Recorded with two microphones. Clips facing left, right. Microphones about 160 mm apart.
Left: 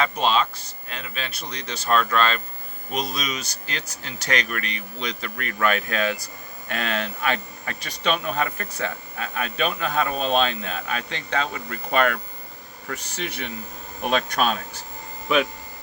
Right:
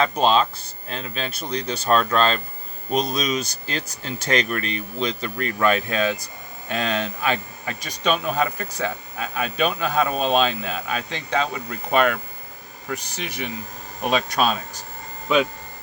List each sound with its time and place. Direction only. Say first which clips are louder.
0.0 s speech: right 3 dB; 35° right (ahead or behind); by 13.5 s 15° right (ahead or behind)